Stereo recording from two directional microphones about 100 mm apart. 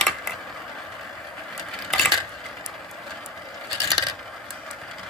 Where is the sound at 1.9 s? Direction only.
Centre (ahead or behind).